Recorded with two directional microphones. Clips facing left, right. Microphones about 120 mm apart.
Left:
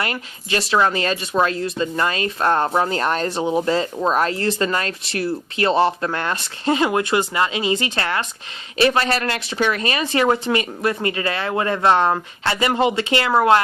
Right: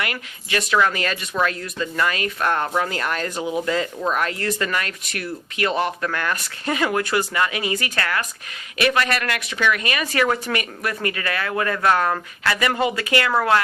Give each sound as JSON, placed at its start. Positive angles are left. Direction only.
{"t": 0.0, "sound": "speech", "side_deg": 30}